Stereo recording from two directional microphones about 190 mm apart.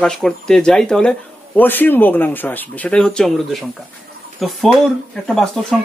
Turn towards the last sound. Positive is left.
turn(degrees=0)  # may be behind; listen again after turning